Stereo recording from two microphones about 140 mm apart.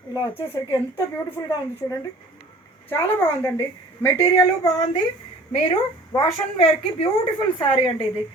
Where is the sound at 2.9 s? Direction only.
15° left (ahead or behind).